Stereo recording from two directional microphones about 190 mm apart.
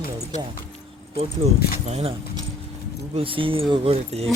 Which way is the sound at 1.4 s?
35° right (ahead or behind).